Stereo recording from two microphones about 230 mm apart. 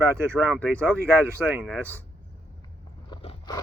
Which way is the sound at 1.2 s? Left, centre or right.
Centre.